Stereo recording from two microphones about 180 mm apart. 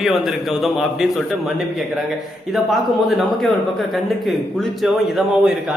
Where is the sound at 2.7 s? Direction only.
Centre (ahead or behind).